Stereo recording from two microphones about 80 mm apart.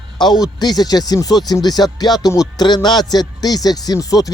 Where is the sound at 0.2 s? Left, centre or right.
Left.